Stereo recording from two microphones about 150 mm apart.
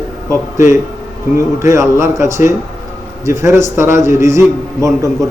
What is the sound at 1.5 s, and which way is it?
A man's voice, 20° right (ahead or behind).